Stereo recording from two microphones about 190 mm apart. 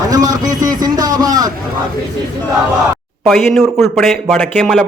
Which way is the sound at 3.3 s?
Centre (ahead or behind).